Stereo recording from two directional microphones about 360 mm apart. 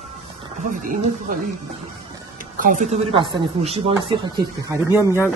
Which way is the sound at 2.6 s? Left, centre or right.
Right.